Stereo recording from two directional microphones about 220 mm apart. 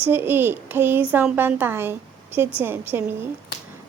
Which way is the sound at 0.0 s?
10° right (ahead or behind).